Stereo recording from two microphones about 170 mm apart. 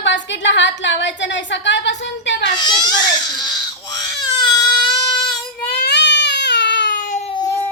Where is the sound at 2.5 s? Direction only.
25° left (ahead or behind).